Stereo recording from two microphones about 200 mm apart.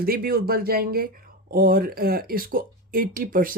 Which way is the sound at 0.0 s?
50° right (ahead or behind).